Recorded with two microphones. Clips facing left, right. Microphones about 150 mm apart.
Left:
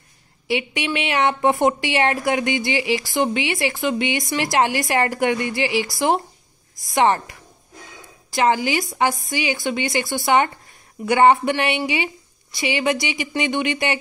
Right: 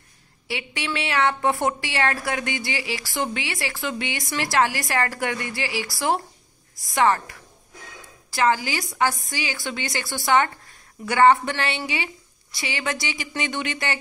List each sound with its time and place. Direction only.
0.5 s a woman's voice: 20° left (ahead or behind)